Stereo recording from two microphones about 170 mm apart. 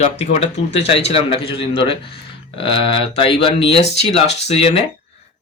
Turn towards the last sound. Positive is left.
turn(degrees=40)  # may be behind; listen again after turning